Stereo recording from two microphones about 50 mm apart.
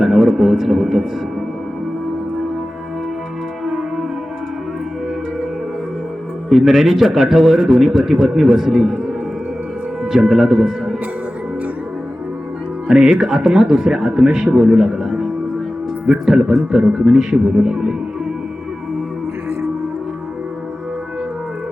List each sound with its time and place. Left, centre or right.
0.0 s a man's voice: centre
6.5 s a man's voice: centre
10.0 s speech: centre
12.9 s speech: centre